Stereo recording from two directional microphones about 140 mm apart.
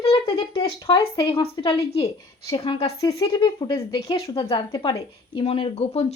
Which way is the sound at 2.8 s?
25° left (ahead or behind).